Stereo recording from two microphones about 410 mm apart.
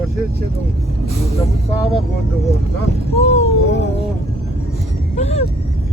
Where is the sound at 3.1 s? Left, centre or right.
Centre.